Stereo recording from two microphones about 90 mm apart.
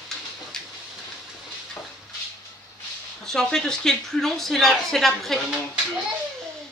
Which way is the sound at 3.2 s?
5° left (ahead or behind).